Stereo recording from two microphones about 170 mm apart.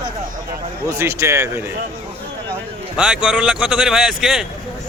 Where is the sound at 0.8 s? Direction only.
15° right (ahead or behind).